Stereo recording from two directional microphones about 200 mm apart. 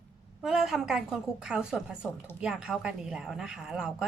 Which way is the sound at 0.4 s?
Centre (ahead or behind).